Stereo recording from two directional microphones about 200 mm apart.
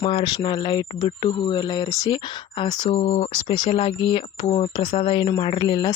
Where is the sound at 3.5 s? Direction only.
25° left (ahead or behind).